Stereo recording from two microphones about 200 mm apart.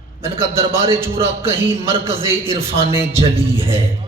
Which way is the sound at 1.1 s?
25° right (ahead or behind).